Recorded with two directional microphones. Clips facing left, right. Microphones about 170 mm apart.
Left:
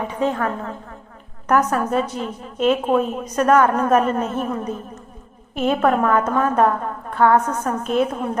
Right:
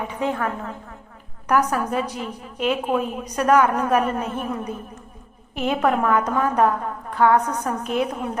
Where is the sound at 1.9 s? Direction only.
10° right (ahead or behind).